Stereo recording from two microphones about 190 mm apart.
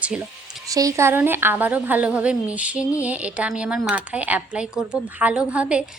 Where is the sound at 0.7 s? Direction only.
15° right (ahead or behind).